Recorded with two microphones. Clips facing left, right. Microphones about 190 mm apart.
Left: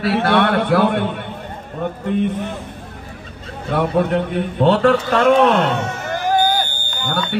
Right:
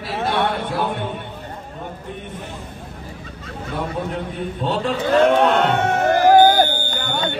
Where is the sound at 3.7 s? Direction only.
70° left (ahead or behind).